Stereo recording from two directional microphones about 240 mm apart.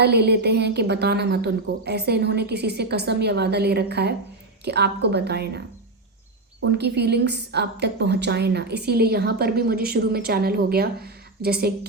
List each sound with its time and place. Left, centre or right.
0.0 s a woman's voice: right